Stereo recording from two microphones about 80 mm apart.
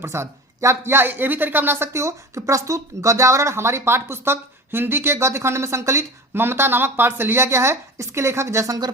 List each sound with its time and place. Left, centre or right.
0.0 s speech: right